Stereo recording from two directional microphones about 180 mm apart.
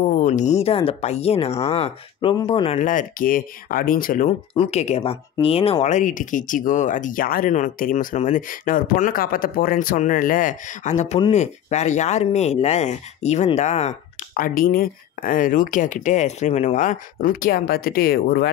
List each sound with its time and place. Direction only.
0.2 s speech: 40° left (ahead or behind)
2.8 s speech: 45° left (ahead or behind)
4.6 s speech: 35° left (ahead or behind); by 18.5 s 60° left (ahead or behind)